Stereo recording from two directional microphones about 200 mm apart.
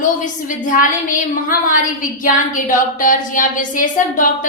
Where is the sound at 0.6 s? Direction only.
40° left (ahead or behind).